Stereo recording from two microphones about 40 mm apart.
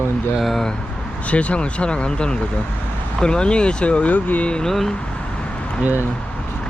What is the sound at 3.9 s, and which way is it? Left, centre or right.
Speech, left.